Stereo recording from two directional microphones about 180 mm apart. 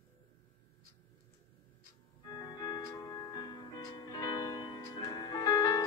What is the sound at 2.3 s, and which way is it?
Music, 20° left (ahead or behind).